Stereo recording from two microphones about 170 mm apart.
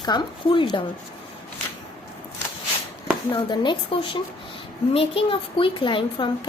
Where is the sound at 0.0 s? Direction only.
25° left (ahead or behind).